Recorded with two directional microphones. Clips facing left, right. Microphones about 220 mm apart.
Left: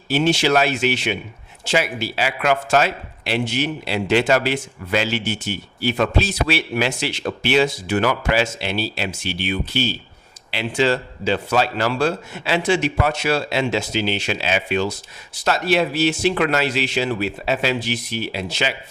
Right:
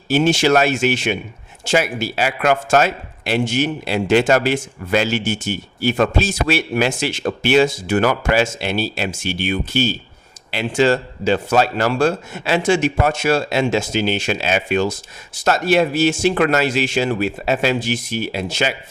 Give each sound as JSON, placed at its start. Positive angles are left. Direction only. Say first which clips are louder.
{"t": 0.1, "sound": "a man's voice", "louder": "right 3 dB", "side_deg": -45}